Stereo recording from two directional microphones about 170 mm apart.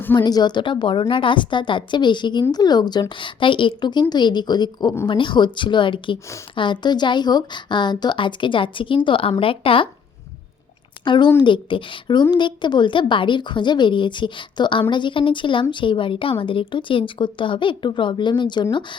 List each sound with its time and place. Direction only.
0.2 s a woman's voice: 25° left (ahead or behind)
11.0 s a woman's voice: 30° left (ahead or behind)